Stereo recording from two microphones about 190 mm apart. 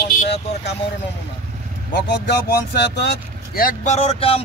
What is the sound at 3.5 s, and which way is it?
Speech, 45° left (ahead or behind).